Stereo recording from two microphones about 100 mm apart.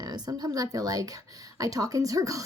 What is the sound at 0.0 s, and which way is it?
A woman's voice, 40° right (ahead or behind).